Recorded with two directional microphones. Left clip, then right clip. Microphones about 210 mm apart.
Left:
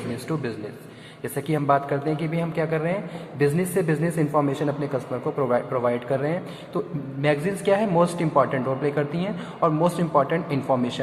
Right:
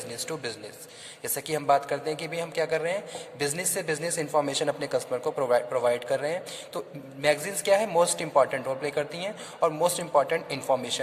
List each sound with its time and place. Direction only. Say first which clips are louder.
1.2 s a man's voice: left 4 dB; 40° right (ahead or behind)